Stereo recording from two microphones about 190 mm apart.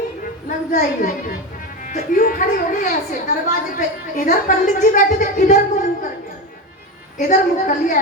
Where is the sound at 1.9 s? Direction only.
40° left (ahead or behind).